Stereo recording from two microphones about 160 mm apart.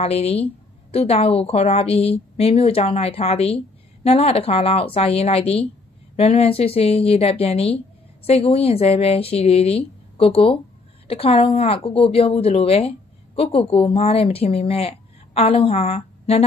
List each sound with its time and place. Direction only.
0.0 s speech: 40° left (ahead or behind)